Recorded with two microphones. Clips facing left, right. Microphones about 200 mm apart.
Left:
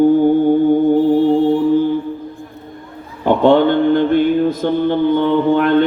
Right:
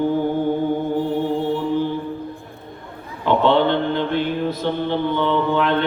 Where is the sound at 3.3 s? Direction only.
45° left (ahead or behind).